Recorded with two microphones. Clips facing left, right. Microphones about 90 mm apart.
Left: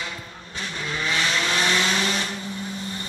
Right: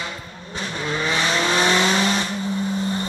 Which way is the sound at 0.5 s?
25° right (ahead or behind).